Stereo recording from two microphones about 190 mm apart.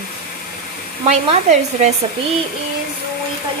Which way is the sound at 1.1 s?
35° right (ahead or behind).